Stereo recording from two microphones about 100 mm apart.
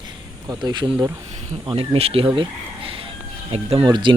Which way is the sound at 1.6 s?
65° right (ahead or behind).